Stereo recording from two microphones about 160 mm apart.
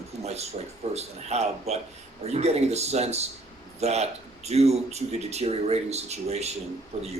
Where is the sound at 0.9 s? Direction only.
40° right (ahead or behind).